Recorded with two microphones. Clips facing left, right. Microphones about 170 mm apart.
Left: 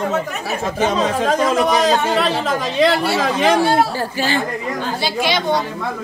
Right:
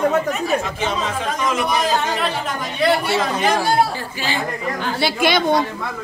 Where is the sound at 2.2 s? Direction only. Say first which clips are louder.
Left 5 dB; 90° left.